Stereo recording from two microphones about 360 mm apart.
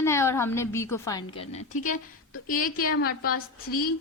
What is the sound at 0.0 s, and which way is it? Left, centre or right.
A woman's voice, centre.